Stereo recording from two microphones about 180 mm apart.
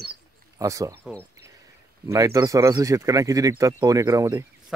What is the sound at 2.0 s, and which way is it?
Speech, 20° right (ahead or behind).